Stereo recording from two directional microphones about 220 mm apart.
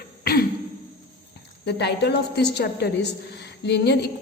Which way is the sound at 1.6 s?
50° left (ahead or behind).